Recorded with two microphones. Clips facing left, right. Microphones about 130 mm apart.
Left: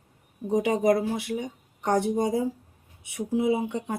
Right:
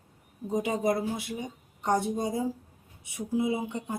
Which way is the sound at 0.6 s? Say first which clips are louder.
Left 5 dB; 85° left.